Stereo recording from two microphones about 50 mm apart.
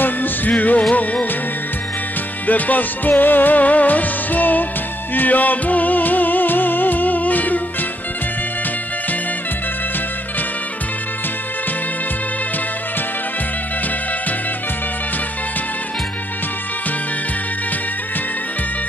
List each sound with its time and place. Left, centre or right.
0.0 s music: left
2.4 s music: left